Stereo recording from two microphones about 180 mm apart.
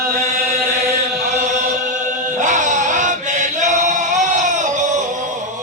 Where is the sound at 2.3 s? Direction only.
45° right (ahead or behind).